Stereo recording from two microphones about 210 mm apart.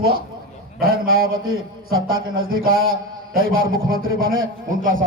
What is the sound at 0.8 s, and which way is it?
A man's voice, 45° right (ahead or behind).